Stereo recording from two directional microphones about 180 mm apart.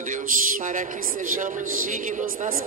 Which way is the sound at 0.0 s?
50° right (ahead or behind).